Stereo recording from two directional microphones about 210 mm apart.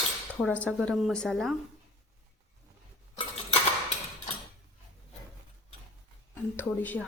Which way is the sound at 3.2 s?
30° left (ahead or behind).